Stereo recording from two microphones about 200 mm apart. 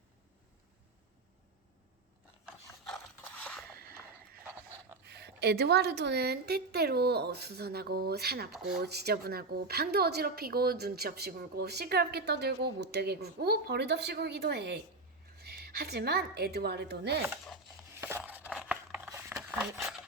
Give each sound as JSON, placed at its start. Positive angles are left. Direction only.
{"t": 5.0, "sound": "a woman's voice", "side_deg": -55}
{"t": 17.2, "sound": "chopping", "side_deg": 0}
{"t": 18.0, "sound": "a sound", "side_deg": -10}